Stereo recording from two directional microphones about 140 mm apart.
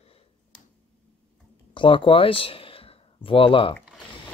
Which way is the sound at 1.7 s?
35° left (ahead or behind).